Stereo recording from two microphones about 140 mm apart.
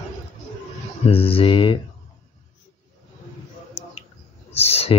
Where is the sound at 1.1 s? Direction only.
40° left (ahead or behind).